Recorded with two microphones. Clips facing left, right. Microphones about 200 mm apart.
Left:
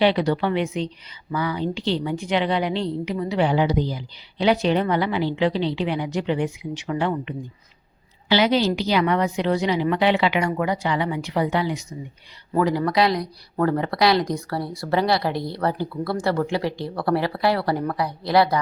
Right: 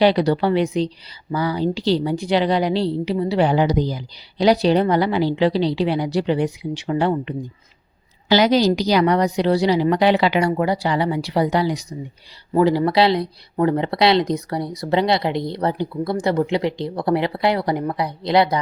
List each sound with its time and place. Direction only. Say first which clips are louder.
0.0 s a woman's voice: right 3 dB; 40° right (ahead or behind); by 18.6 s 20° right (ahead or behind)